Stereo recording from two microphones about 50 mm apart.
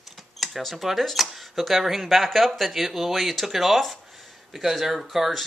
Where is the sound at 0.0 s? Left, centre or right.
Centre.